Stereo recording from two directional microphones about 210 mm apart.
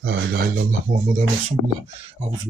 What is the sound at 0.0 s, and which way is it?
Speech, 55° right (ahead or behind).